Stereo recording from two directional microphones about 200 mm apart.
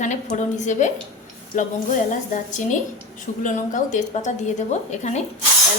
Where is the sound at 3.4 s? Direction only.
40° left (ahead or behind).